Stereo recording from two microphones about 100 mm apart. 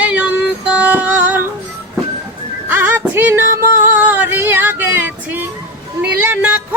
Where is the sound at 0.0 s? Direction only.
10° right (ahead or behind).